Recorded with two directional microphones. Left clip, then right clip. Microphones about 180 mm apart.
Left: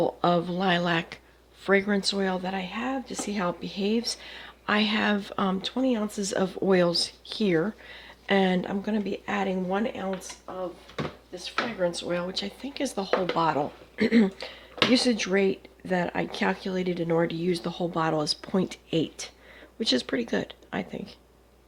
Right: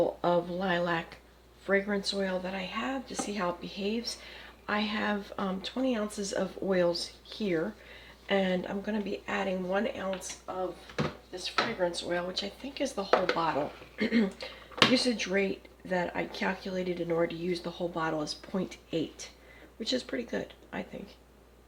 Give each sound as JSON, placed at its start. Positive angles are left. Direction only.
{"t": 0.2, "sound": "speech", "side_deg": 60}
{"t": 11.8, "sound": "speech", "side_deg": 55}